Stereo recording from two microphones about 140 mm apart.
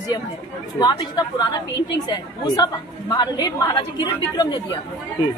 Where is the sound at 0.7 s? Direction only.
30° left (ahead or behind).